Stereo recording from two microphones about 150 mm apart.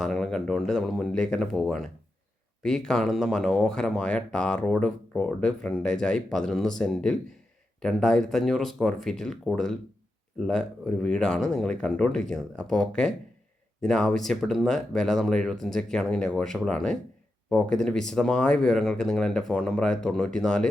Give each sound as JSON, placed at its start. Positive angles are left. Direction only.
{"t": 0.0, "sound": "speech", "side_deg": 0}